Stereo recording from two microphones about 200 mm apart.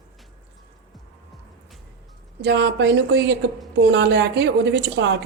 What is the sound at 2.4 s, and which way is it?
A woman's voice, 60° right (ahead or behind).